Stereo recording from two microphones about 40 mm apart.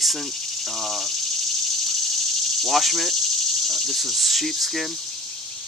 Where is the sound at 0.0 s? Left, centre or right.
Centre.